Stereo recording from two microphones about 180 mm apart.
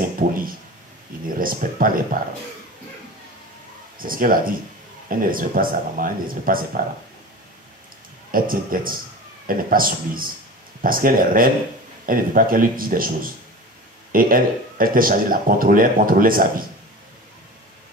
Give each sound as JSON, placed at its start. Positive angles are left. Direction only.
{"t": 0.2, "sound": "a sound", "side_deg": -45}
{"t": 1.2, "sound": "speech", "side_deg": -50}
{"t": 4.0, "sound": "speech", "side_deg": -50}
{"t": 8.3, "sound": "speech", "side_deg": -50}